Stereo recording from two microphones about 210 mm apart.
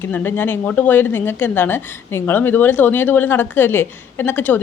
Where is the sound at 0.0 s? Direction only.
10° left (ahead or behind).